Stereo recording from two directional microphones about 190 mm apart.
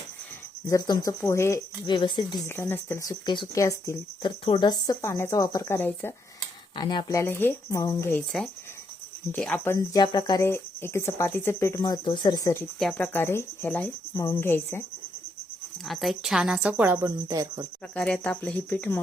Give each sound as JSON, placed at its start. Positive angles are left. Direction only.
{"t": 0.7, "sound": "speech", "side_deg": 20}
{"t": 6.7, "sound": "speech", "side_deg": 25}
{"t": 9.3, "sound": "speech", "side_deg": 5}
{"t": 9.9, "sound": "speech", "side_deg": 20}
{"t": 15.8, "sound": "a woman's voice", "side_deg": 0}
{"t": 17.9, "sound": "speech", "side_deg": 5}